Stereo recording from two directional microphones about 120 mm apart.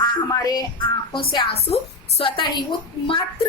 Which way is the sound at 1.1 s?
45° left (ahead or behind).